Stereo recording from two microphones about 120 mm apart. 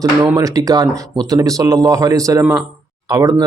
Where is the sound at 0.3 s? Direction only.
30° right (ahead or behind).